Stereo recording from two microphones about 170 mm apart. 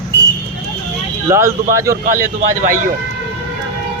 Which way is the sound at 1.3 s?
15° right (ahead or behind).